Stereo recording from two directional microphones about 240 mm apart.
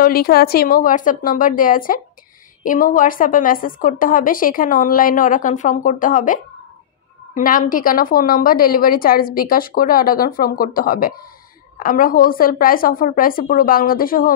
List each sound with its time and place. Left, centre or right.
0.0 s a woman's voice: left